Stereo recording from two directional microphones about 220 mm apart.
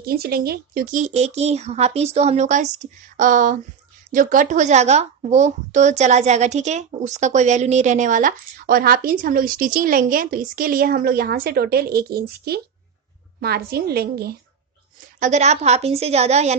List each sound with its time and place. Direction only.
0.0 s a woman's voice: 45° right (ahead or behind)
15.1 s a woman's voice: 35° right (ahead or behind)